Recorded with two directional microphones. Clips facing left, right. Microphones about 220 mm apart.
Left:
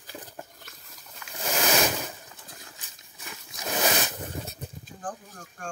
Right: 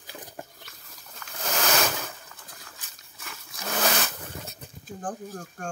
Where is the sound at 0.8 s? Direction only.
10° left (ahead or behind).